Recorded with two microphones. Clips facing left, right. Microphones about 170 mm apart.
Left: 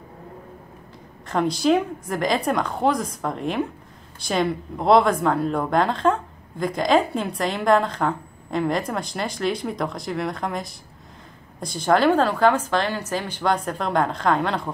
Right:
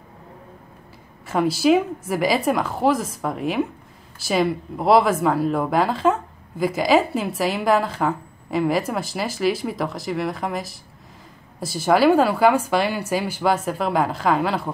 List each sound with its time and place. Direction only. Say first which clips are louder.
1.2 s speech: right 2 dB; 5° right (ahead or behind)